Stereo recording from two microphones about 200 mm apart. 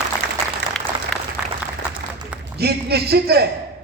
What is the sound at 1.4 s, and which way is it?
Applause, 5° right (ahead or behind).